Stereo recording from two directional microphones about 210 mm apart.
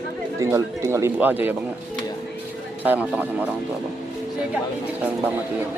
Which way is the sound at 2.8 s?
10° right (ahead or behind).